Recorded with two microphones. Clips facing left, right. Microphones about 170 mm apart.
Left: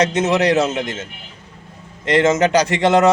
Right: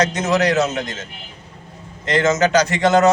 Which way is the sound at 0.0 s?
30° left (ahead or behind).